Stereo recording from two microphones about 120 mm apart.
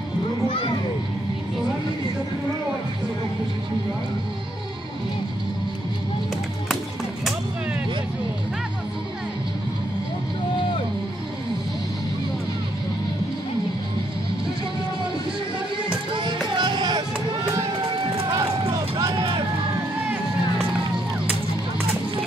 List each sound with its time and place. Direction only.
15.9 s music: 45° right (ahead or behind)